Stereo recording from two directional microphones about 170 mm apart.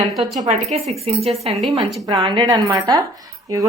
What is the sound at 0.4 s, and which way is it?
Speech, 40° right (ahead or behind).